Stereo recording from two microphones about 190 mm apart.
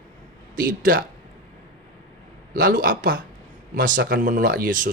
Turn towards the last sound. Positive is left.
turn(degrees=-45)  # may be behind; listen again after turning